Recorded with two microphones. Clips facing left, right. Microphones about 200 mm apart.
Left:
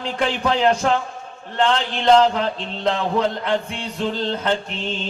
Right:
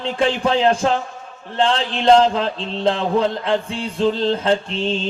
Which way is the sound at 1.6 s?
30° right (ahead or behind).